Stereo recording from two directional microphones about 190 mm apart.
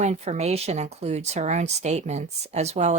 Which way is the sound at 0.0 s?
35° right (ahead or behind).